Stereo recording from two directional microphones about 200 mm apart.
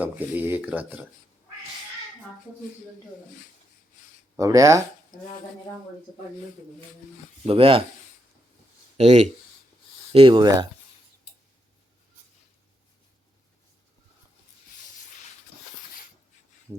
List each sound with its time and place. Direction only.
0.0 s speech: 10° right (ahead or behind)
4.4 s speech: 15° right (ahead or behind)
7.4 s speech: 30° right (ahead or behind)
9.0 s speech: 35° right (ahead or behind)